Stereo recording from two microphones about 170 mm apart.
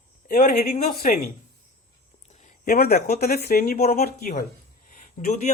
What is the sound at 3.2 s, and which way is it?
Speech, 60° left (ahead or behind).